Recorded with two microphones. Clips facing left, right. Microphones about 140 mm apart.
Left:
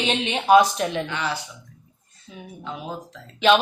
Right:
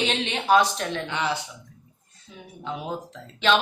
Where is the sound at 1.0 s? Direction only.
20° right (ahead or behind).